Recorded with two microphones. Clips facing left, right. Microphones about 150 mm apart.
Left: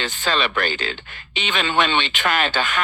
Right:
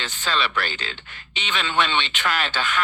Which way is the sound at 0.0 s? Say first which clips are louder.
Left 3 dB; 50° left (ahead or behind).